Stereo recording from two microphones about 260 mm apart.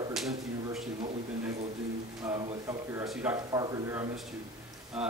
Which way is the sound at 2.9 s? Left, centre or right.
Centre.